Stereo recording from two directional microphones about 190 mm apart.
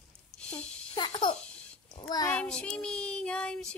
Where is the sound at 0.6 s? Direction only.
25° left (ahead or behind).